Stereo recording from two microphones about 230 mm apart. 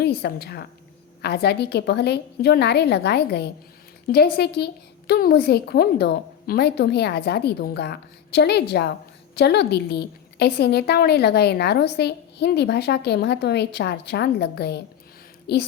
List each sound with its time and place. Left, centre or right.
0.0 s a woman's voice: left